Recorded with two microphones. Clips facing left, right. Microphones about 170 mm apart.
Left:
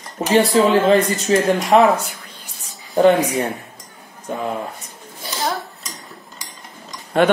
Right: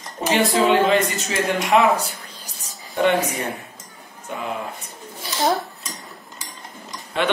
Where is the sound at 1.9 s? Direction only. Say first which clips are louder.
Right 1 dB; 35° right (ahead or behind).